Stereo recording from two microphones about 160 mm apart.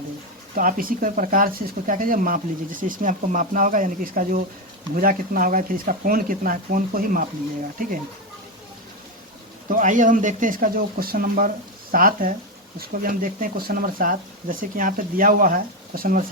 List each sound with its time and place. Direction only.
0.5 s speech: 60° right (ahead or behind)
9.6 s speech: 55° right (ahead or behind)